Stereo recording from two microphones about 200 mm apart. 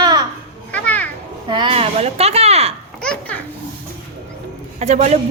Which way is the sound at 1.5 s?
25° right (ahead or behind).